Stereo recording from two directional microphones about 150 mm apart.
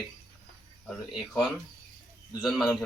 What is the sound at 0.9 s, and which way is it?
Speech, centre (ahead or behind).